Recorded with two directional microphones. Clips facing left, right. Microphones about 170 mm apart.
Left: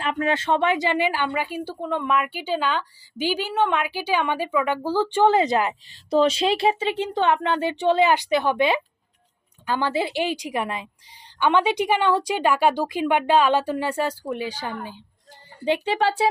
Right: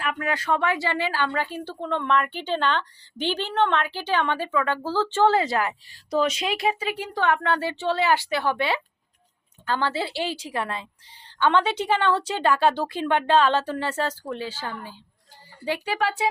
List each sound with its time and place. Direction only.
0.0 s speech: 25° left (ahead or behind)